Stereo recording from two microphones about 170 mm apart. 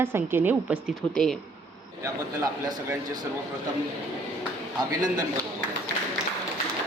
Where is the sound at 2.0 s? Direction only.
20° right (ahead or behind).